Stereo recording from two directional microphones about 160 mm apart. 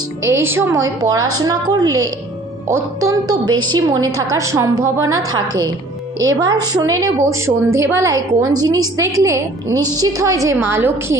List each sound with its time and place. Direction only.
0.2 s a woman's voice: 15° right (ahead or behind)
6.2 s a woman's voice: 25° right (ahead or behind)